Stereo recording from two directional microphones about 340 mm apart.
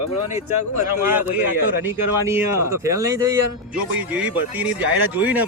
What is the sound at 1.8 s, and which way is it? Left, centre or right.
Speech, centre.